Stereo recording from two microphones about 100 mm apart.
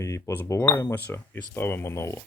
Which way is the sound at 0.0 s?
30° left (ahead or behind).